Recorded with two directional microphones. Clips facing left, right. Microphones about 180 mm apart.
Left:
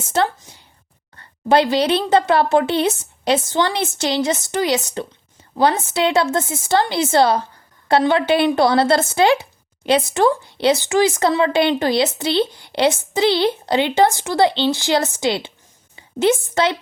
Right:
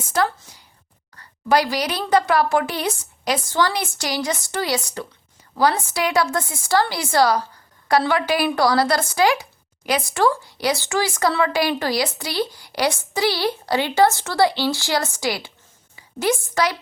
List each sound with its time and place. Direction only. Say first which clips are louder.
0.0 s a woman's voice: left 2 dB; 25° left (ahead or behind)